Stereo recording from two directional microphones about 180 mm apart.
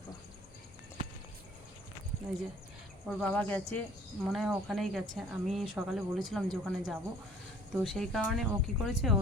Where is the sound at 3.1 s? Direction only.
Centre (ahead or behind).